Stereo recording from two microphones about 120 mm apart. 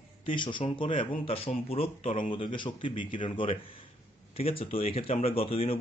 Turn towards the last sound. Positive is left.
turn(degrees=50)  # may be behind; listen again after turning